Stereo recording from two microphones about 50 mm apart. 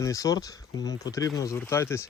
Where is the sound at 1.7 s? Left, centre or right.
Left.